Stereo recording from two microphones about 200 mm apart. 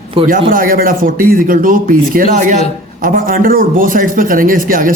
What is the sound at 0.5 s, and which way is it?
Speech, 45° right (ahead or behind).